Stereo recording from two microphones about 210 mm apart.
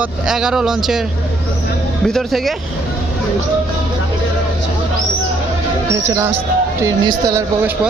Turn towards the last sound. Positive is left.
turn(degrees=-15)  # may be behind; listen again after turning